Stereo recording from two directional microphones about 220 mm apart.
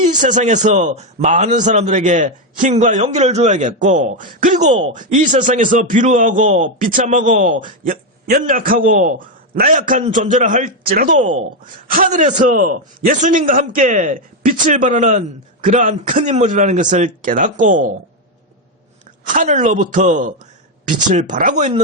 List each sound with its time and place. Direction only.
0.0 s a man's voice: 35° right (ahead or behind)
19.3 s a man's voice: 35° right (ahead or behind)